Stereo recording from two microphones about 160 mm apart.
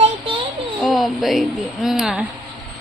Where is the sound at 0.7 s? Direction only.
Centre (ahead or behind).